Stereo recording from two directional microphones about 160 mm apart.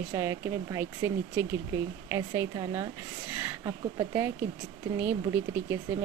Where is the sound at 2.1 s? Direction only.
20° right (ahead or behind).